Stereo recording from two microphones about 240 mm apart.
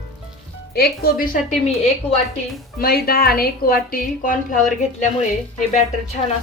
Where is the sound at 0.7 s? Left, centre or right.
Left.